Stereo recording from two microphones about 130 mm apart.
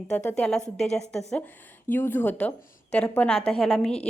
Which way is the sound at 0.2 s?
15° left (ahead or behind).